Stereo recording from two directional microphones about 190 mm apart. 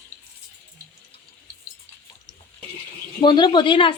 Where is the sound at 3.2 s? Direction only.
25° left (ahead or behind).